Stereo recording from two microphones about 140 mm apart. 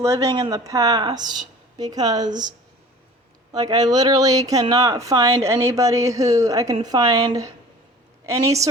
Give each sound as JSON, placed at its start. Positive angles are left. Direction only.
{"t": 0.0, "sound": "a woman's voice", "side_deg": -25}
{"t": 8.3, "sound": "a woman's voice", "side_deg": -20}